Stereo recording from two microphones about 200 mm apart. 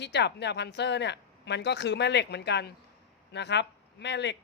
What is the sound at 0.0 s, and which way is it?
Speech, 55° left (ahead or behind).